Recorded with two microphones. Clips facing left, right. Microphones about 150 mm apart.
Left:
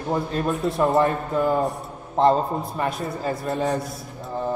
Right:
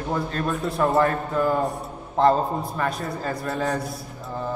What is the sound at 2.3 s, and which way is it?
A man's voice, centre (ahead or behind).